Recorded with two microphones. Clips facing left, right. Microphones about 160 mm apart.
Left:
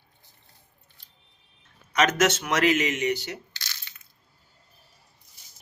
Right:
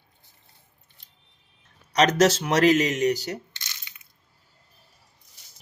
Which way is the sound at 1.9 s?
35° right (ahead or behind).